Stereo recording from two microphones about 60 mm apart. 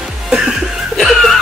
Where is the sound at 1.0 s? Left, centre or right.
Centre.